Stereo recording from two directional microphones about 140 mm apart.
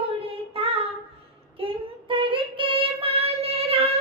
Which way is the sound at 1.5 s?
40° right (ahead or behind).